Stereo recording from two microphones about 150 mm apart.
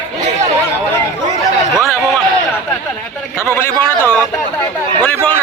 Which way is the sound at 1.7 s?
Centre (ahead or behind).